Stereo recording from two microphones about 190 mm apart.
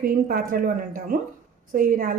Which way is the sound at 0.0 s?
50° right (ahead or behind).